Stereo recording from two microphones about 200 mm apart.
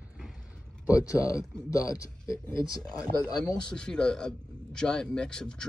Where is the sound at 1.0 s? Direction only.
15° left (ahead or behind).